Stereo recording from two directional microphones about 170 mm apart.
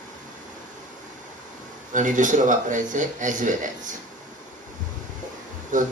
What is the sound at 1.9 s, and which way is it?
A man's voice, 50° right (ahead or behind).